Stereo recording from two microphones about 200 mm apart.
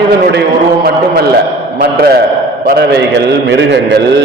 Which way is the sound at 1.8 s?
50° right (ahead or behind).